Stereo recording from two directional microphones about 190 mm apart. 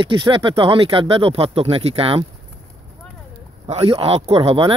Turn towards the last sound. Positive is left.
turn(degrees=-30)  # may be behind; listen again after turning